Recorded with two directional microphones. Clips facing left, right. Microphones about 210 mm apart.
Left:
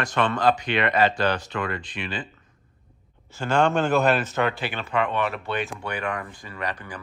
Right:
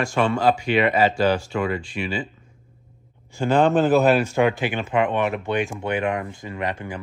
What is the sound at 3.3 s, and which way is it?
A man's voice, 15° right (ahead or behind).